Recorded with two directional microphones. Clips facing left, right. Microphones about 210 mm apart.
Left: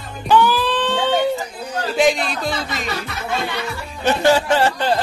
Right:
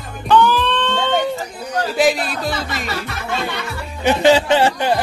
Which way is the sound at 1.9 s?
5° right (ahead or behind).